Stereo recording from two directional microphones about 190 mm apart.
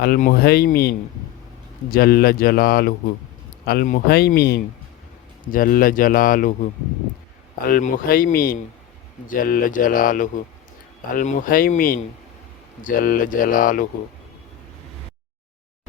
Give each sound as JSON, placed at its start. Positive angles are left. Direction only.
{"t": 0.0, "sound": "speech", "side_deg": 50}
{"t": 7.7, "sound": "speech", "side_deg": 45}